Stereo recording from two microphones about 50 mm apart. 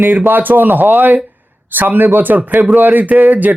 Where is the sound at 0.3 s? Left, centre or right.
Right.